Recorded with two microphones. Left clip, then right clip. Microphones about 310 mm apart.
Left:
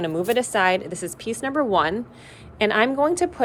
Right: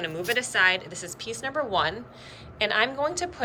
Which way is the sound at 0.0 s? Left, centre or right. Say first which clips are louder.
Left 5 dB; centre.